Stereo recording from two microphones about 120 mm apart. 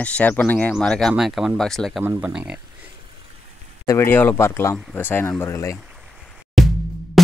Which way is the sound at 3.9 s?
20° left (ahead or behind).